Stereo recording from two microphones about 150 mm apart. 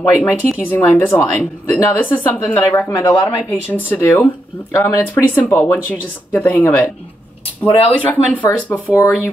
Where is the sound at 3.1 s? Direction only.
30° left (ahead or behind).